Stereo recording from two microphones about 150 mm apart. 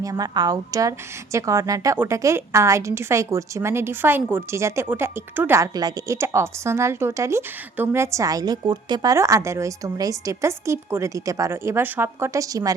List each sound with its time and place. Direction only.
0.0 s a woman's voice: 25° right (ahead or behind)